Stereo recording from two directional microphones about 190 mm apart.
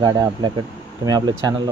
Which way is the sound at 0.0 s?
20° right (ahead or behind).